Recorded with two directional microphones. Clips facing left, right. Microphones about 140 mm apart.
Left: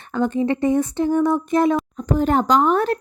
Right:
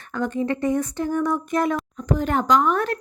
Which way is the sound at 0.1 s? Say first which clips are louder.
Left 4 dB; 25° left (ahead or behind).